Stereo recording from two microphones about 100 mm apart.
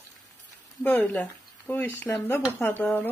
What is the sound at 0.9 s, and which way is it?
Speech, 20° left (ahead or behind).